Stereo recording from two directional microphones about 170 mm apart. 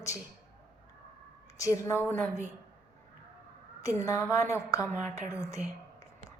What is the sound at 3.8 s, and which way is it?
A woman's voice, 20° left (ahead or behind).